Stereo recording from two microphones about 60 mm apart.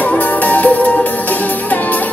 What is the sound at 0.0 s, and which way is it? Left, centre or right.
Music, left.